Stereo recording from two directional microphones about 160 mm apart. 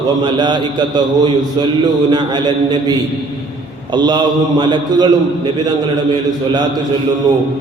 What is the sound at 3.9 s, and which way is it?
A man's voice, 25° right (ahead or behind).